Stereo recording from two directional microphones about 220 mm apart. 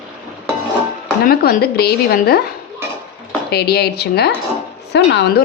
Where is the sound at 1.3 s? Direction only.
45° left (ahead or behind).